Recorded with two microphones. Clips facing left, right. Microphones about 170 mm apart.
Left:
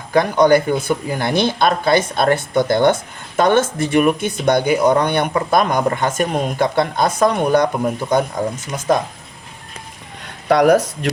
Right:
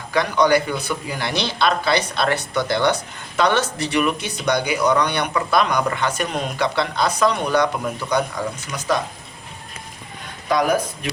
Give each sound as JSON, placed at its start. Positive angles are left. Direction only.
{"t": 0.1, "sound": "speech", "side_deg": 50}
{"t": 10.5, "sound": "speech", "side_deg": 70}